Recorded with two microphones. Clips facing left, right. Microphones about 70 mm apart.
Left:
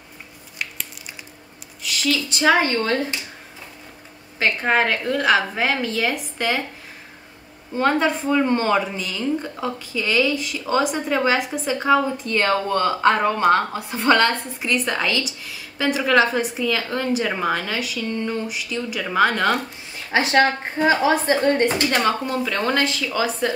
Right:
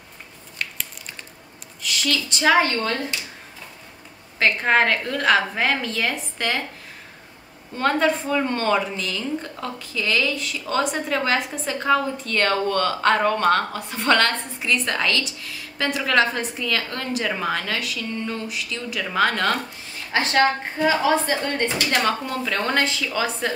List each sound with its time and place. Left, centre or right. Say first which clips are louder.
1.8 s a woman's voice: left 2 dB; centre
2.7 s speech: left 3 dB; centre
4.4 s a woman's voice: right 1 dB; centre
7.7 s a woman's voice: left 1 dB; centre; by 21.6 s left
22.0 s a woman's voice: left 2 dB; centre